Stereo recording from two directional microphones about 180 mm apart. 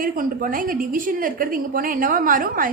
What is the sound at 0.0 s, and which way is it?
A woman's voice, 50° right (ahead or behind).